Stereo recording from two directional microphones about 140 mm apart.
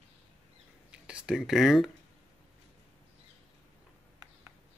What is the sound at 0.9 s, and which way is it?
Speech, 5° right (ahead or behind).